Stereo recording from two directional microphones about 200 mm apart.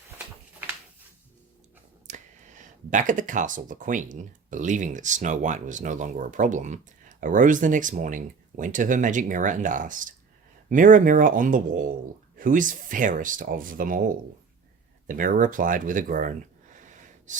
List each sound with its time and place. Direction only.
2.0 s speech: 40° right (ahead or behind)
16.8 s wheeze: 40° right (ahead or behind)